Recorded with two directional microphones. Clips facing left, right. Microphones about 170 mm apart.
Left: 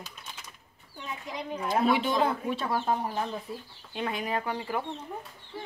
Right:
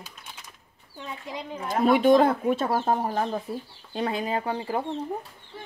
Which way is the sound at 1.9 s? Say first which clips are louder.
Right 8 dB; 50° right (ahead or behind).